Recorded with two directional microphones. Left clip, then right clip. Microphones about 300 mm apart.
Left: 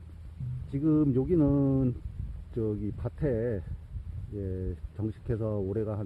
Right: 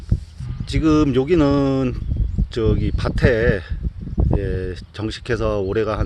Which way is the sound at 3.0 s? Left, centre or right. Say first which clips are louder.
Right 14 dB; centre.